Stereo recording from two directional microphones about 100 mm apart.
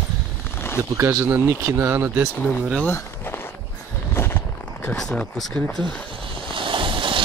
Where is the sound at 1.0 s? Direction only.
30° right (ahead or behind).